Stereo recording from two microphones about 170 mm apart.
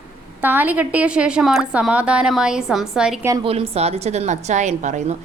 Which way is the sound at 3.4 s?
35° right (ahead or behind).